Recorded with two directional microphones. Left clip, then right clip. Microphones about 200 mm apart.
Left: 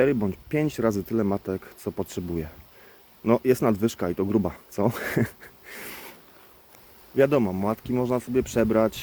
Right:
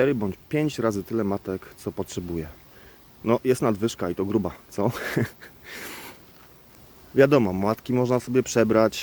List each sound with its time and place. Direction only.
0.0 s speech: 5° right (ahead or behind)
7.2 s speech: 30° right (ahead or behind)